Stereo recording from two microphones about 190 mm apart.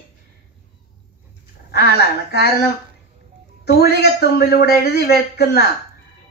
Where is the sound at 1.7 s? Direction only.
60° left (ahead or behind).